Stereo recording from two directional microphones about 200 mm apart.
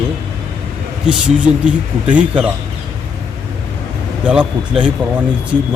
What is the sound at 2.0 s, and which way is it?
Speech, 5° right (ahead or behind).